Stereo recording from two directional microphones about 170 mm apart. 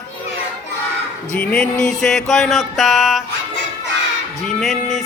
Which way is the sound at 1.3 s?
5° left (ahead or behind).